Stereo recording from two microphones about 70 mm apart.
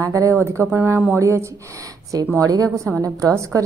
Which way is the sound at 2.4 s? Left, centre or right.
Right.